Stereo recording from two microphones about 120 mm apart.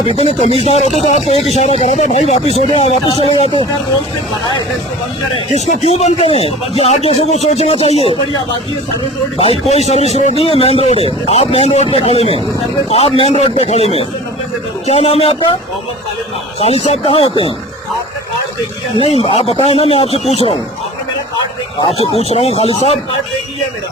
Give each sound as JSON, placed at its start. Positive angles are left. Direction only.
{"t": 0.0, "sound": "speech", "side_deg": 55}
{"t": 5.5, "sound": "speech", "side_deg": 65}
{"t": 9.4, "sound": "speech", "side_deg": 55}
{"t": 16.6, "sound": "speech", "side_deg": 55}
{"t": 19.2, "sound": "speech", "side_deg": 55}
{"t": 21.8, "sound": "speech", "side_deg": 55}